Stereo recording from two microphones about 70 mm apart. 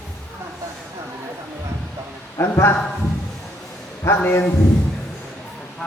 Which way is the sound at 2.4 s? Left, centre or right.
Left.